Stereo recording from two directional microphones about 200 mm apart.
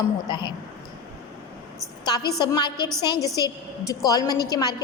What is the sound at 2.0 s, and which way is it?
A woman's voice, 20° left (ahead or behind).